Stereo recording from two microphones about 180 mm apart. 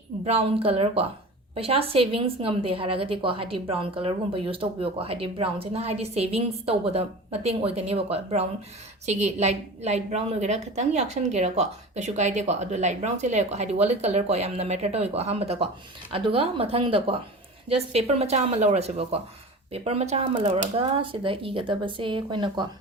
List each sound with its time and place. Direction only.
0.3 s a woman's voice: 35° right (ahead or behind)